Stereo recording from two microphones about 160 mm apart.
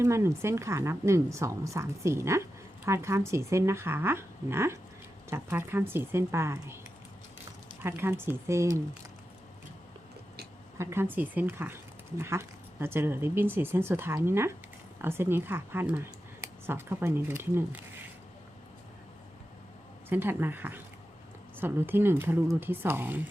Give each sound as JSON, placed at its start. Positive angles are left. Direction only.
{"t": 0.0, "sound": "speech", "side_deg": -15}
{"t": 7.8, "sound": "speech", "side_deg": -15}
{"t": 10.8, "sound": "speech", "side_deg": -15}
{"t": 20.1, "sound": "speech", "side_deg": -15}